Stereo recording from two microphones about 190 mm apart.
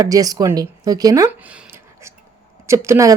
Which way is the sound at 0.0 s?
20° right (ahead or behind).